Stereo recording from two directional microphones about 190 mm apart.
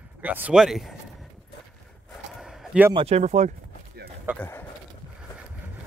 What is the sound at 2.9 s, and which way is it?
Speech, 35° right (ahead or behind).